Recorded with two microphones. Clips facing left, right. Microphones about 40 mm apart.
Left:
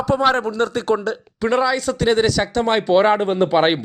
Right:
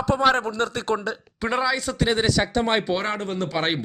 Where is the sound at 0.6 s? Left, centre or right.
Left.